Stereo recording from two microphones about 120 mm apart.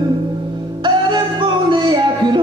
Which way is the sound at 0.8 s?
40° right (ahead or behind).